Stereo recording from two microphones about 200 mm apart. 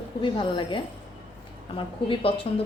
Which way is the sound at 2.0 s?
25° left (ahead or behind).